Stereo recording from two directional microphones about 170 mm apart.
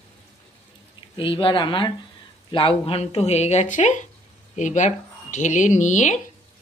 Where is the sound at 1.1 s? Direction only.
30° left (ahead or behind).